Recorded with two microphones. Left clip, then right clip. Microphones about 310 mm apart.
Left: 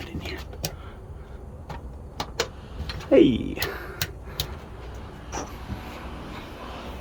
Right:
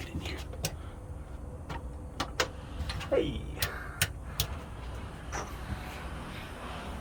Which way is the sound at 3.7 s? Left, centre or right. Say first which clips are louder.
Left 6 dB; left.